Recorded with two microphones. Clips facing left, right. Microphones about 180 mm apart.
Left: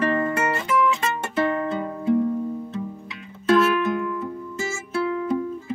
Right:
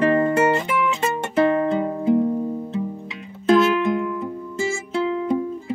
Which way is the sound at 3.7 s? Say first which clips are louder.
Right 2 dB; 20° right (ahead or behind).